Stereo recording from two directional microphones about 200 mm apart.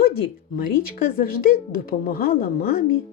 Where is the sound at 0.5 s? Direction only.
45° left (ahead or behind).